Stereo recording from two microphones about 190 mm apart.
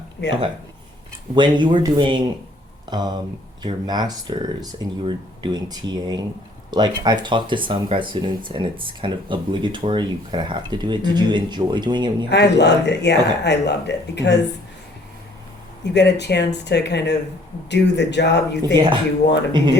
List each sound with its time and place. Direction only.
0.2 s speech: 65° left (ahead or behind)
1.4 s speech: 25° right (ahead or behind)
12.3 s speech: 65° left (ahead or behind)
15.9 s speech: 65° left (ahead or behind)
18.6 s speech: 25° right (ahead or behind)